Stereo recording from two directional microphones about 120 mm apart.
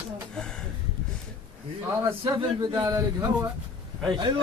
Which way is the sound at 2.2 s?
40° right (ahead or behind).